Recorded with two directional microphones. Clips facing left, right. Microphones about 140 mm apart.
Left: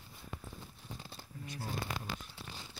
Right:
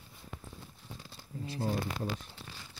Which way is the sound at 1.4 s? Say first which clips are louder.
Right 9 dB; 30° right (ahead or behind).